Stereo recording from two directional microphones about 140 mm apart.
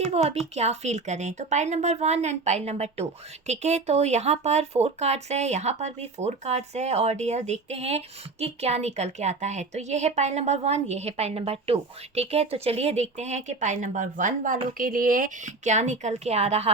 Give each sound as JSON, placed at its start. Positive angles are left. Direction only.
{"t": 0.0, "sound": "a woman's voice", "side_deg": -45}